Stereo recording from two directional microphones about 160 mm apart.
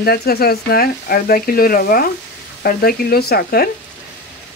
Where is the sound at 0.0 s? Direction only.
75° left (ahead or behind).